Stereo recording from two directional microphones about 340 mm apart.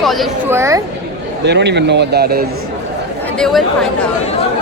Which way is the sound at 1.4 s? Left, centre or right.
Right.